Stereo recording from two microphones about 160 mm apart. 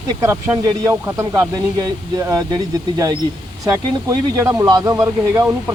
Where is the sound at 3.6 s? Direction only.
20° right (ahead or behind).